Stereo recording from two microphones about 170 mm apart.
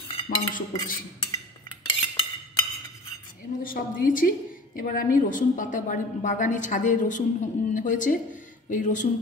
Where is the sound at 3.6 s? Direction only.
55° left (ahead or behind).